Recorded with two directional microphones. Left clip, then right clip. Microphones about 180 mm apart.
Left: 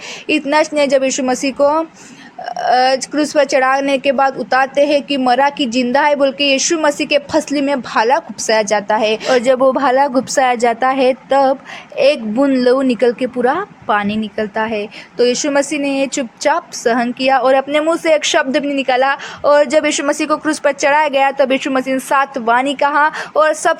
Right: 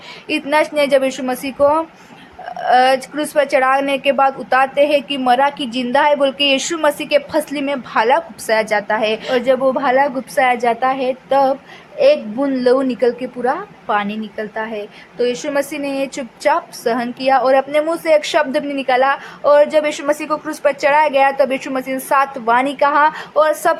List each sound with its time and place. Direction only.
0.5 s speech: 20° left (ahead or behind)
9.3 s a woman's voice: 35° left (ahead or behind)